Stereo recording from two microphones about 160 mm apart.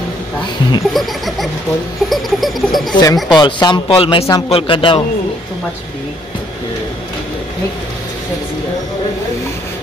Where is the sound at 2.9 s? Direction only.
20° left (ahead or behind).